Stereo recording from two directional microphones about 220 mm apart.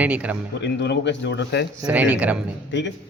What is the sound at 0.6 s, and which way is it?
A man's voice, 50° left (ahead or behind).